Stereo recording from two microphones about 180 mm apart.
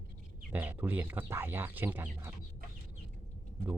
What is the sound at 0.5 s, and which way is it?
Speech, 10° right (ahead or behind).